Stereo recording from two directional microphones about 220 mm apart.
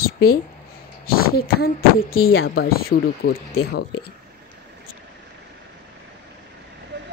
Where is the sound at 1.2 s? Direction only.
45° left (ahead or behind).